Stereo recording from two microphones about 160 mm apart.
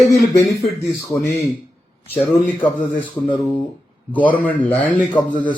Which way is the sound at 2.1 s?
10° left (ahead or behind).